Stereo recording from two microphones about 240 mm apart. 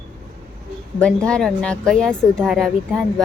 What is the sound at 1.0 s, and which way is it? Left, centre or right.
Speech, centre.